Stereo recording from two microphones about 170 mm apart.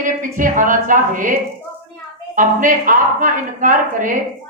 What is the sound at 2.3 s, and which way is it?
A man's voice, 50° right (ahead or behind).